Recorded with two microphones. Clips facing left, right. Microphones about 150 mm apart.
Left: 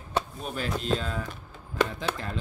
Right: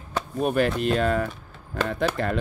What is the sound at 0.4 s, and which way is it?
Speech, 60° right (ahead or behind).